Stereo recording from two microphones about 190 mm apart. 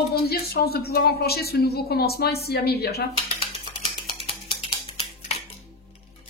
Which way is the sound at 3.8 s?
30° left (ahead or behind).